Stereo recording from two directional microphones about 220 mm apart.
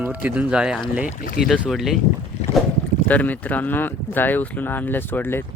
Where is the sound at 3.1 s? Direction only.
5° left (ahead or behind).